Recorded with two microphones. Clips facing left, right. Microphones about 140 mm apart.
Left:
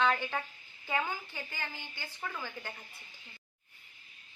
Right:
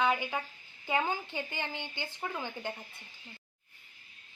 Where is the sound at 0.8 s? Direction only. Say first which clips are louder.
Right 3 dB; 25° right (ahead or behind).